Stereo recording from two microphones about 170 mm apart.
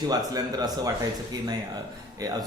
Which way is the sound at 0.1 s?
20° right (ahead or behind).